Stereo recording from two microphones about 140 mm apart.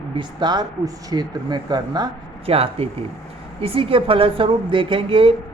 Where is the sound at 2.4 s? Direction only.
45° right (ahead or behind).